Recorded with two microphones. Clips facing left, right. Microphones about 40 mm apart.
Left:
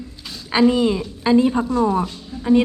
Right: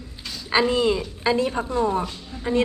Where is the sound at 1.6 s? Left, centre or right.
Right.